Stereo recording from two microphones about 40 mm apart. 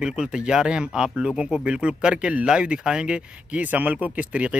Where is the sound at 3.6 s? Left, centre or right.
Right.